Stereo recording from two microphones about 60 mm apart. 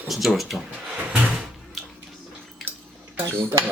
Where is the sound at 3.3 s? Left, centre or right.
Right.